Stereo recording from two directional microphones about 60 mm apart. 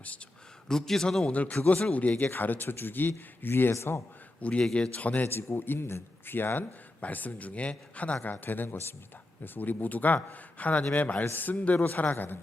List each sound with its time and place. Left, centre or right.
0.7 s a man's voice: centre
1.3 s speech: left
4.4 s a man's voice: left
5.5 s a man's voice: left